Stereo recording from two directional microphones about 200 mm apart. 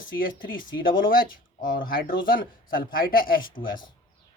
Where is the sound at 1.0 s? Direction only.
45° left (ahead or behind).